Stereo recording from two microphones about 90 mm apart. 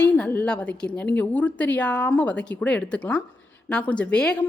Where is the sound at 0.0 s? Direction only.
20° left (ahead or behind).